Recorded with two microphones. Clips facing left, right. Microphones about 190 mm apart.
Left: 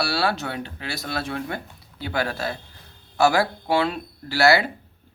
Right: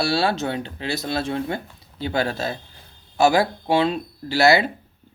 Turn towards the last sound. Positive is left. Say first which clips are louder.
# right 2 dB
turn(degrees=-20)  # may be behind; listen again after turning